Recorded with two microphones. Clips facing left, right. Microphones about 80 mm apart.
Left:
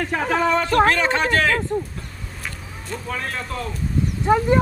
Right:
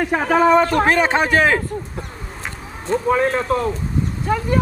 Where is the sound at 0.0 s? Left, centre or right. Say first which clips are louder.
Right 5 dB; centre.